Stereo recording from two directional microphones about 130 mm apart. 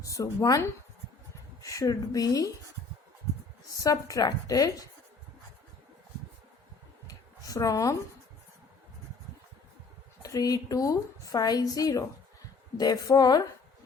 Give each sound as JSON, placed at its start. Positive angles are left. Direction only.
{"t": 0.0, "sound": "a woman's voice", "side_deg": 25}
{"t": 1.6, "sound": "a woman's voice", "side_deg": 25}
{"t": 3.8, "sound": "a woman's voice", "side_deg": 30}
{"t": 7.1, "sound": "a sound", "side_deg": 25}
{"t": 10.2, "sound": "a woman's voice", "side_deg": 30}